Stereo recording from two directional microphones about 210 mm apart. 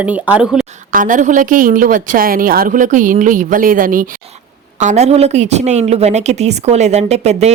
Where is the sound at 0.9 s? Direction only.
40° right (ahead or behind).